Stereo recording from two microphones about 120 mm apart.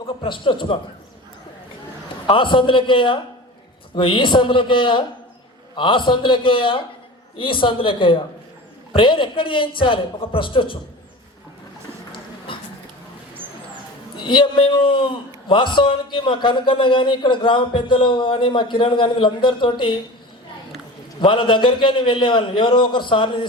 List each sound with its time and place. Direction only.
0.2 s a man's voice: 45° left (ahead or behind)
2.2 s a man's voice: 45° left (ahead or behind)
12.5 s a sound: 45° left (ahead or behind)
14.2 s a man's voice: 40° left (ahead or behind)
21.2 s a man's voice: 45° left (ahead or behind)